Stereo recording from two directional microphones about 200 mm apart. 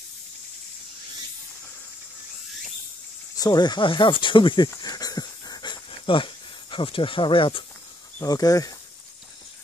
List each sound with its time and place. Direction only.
3.3 s speech: 20° left (ahead or behind)
4.6 s dog: 20° left (ahead or behind)
8.2 s speech: 20° left (ahead or behind)